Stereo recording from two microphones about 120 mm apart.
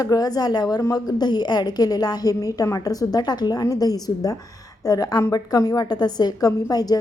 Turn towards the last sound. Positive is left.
turn(degrees=30)  # may be behind; listen again after turning